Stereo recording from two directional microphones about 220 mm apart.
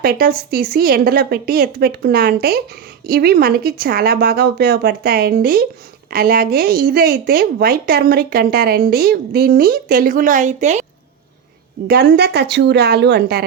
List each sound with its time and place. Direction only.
0.0 s speech: 40° right (ahead or behind)
11.9 s speech: 45° right (ahead or behind)